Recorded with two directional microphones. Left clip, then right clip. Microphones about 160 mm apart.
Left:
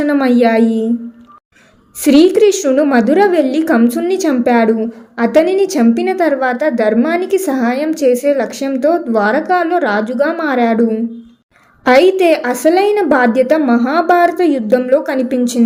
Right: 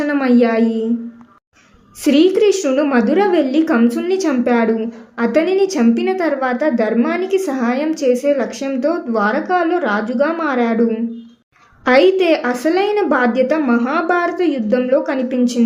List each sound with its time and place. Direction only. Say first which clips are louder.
0.0 s a woman's voice: left 3 dB; 25° left (ahead or behind)
2.0 s a woman's voice: left 4 dB; 25° left (ahead or behind)